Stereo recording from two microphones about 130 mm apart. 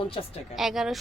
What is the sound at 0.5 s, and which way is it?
Speech, centre (ahead or behind).